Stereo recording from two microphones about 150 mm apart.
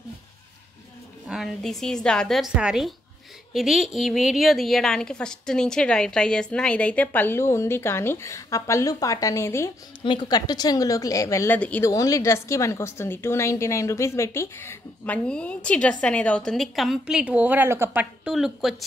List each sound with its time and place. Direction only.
1.2 s a woman's voice: centre (ahead or behind); by 9.7 s 20° left (ahead or behind)
10.0 s a woman's voice: 30° left (ahead or behind); by 11.9 s 10° left (ahead or behind)
11.9 s a woman's voice: 20° left (ahead or behind); by 18.0 s 15° right (ahead or behind)
18.2 s a woman's voice: centre (ahead or behind)